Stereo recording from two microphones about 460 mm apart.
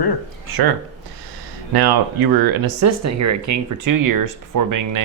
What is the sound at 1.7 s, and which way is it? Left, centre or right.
Speech, right.